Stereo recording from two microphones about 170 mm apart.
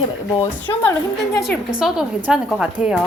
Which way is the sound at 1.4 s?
Centre (ahead or behind).